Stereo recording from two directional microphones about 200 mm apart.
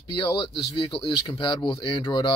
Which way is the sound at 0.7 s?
25° left (ahead or behind).